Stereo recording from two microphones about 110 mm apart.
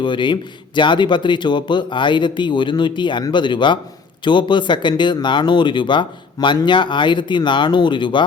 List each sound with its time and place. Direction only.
0.0 s speech: 45° left (ahead or behind)